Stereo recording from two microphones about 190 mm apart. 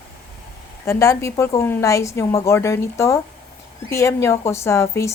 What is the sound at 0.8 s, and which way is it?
Speech, 15° left (ahead or behind).